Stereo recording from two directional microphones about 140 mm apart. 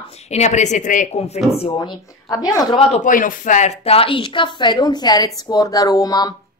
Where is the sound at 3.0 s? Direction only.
70° left (ahead or behind).